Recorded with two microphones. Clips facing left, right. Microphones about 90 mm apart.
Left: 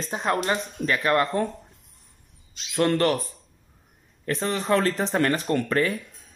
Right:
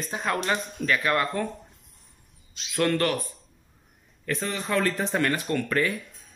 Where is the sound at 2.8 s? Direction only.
30° left (ahead or behind).